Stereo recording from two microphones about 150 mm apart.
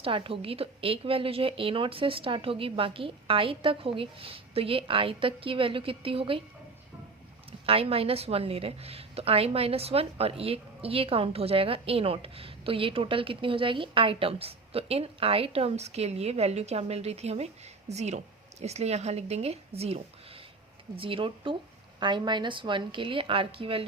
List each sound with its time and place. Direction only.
0.0 s a woman's voice: 35° right (ahead or behind)
7.6 s a woman's voice: 40° right (ahead or behind)